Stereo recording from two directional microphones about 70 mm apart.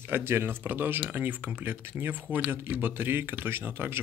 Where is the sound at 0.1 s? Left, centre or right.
Right.